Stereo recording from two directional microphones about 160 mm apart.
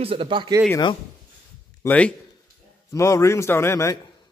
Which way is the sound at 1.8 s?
10° left (ahead or behind).